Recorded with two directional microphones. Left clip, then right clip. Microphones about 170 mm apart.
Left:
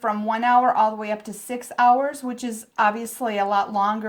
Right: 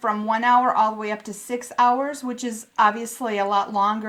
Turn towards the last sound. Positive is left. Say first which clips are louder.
# even
turn(degrees=30)  # may be behind; listen again after turning